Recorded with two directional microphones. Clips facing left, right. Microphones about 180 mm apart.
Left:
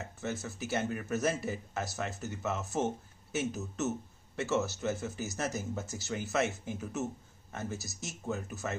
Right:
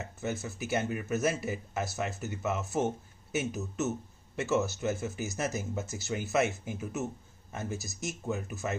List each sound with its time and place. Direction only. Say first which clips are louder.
0.2 s speech: right 2 dB; 10° right (ahead or behind)